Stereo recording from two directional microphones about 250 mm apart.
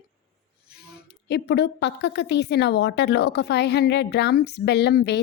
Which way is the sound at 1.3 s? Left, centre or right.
Left.